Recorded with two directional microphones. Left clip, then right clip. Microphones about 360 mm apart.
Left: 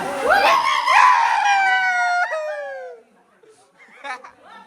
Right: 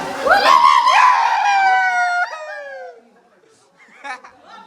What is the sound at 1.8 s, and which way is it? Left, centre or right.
Howl, centre.